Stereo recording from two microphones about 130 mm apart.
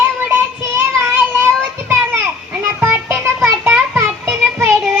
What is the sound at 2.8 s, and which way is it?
Music, 20° right (ahead or behind).